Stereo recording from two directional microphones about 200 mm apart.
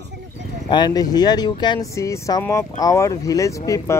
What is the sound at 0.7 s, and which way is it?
Speech, 20° left (ahead or behind).